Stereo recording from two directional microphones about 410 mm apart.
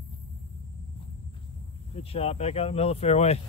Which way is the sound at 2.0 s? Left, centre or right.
Centre.